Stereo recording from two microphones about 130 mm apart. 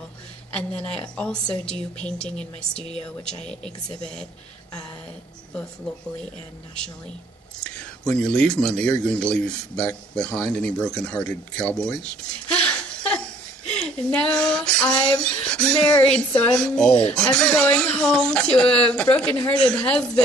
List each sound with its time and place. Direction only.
0.5 s speech: 10° left (ahead or behind)
7.6 s speech: 5° left (ahead or behind)
13.7 s a sound: 5° left (ahead or behind)
15.1 s speech: 5° left (ahead or behind)